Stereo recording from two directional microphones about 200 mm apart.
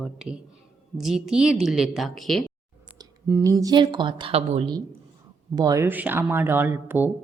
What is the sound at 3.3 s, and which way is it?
Speech, 15° right (ahead or behind).